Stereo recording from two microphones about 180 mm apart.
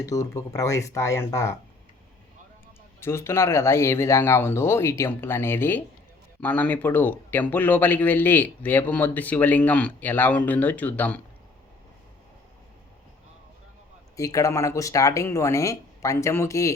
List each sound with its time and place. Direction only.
0.0 s speech: 20° left (ahead or behind)
3.0 s speech: 15° left (ahead or behind)
14.2 s speech: 20° left (ahead or behind)